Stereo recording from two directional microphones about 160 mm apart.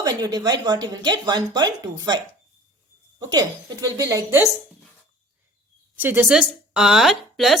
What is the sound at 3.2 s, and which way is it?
A woman's voice, 20° right (ahead or behind).